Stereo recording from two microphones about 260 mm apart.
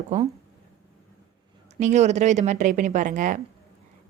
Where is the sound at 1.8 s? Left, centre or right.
Right.